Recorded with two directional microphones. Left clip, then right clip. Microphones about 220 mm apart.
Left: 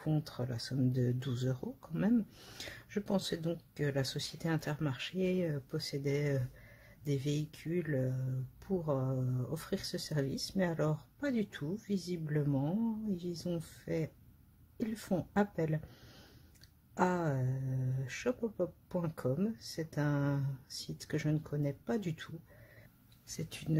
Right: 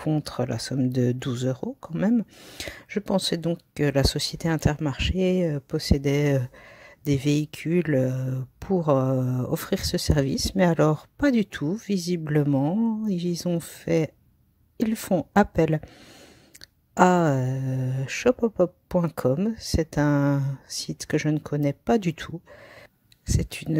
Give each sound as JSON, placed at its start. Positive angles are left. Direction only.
{"t": 0.0, "sound": "speech", "side_deg": -35}
{"t": 16.9, "sound": "speech", "side_deg": -40}